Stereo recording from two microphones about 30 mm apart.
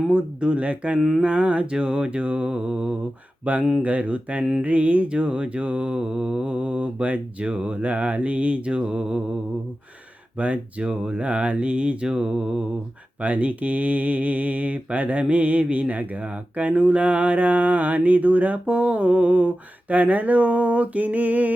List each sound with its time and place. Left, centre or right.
0.1 s speech: right
1.2 s mantra: right
1.7 s speech: right
3.4 s mantra: right
4.6 s speech: right
6.0 s mantra: right
6.4 s mantra: right
10.3 s speech: right
12.0 s mantra: right
13.2 s speech: right
18.6 s mantra: right
20.0 s speech: right